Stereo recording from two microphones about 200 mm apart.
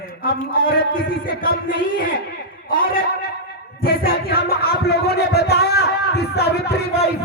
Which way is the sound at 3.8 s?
50° left (ahead or behind).